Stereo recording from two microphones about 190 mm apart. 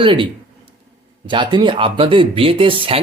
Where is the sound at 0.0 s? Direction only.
25° right (ahead or behind).